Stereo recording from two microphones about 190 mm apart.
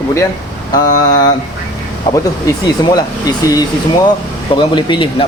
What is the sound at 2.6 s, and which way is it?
Speech, 20° left (ahead or behind).